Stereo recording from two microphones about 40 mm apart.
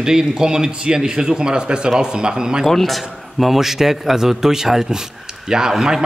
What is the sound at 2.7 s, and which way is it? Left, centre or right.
A man's voice, centre.